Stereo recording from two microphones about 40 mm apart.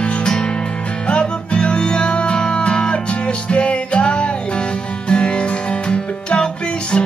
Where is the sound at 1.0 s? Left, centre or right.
Left.